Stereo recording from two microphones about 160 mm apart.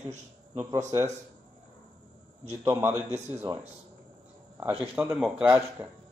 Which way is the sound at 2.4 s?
20° right (ahead or behind).